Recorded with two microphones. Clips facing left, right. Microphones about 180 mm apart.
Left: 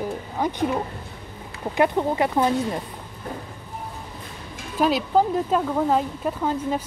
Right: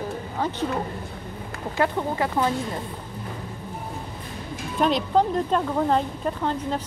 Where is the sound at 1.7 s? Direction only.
20° left (ahead or behind).